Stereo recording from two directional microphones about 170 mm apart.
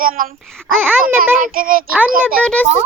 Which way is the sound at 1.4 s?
55° right (ahead or behind).